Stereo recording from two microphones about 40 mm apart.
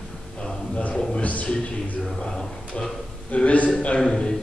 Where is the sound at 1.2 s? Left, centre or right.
Left.